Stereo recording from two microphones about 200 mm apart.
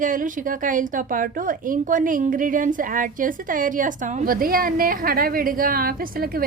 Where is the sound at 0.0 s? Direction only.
40° right (ahead or behind).